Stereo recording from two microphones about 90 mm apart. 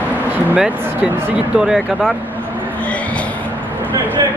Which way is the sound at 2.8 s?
15° left (ahead or behind).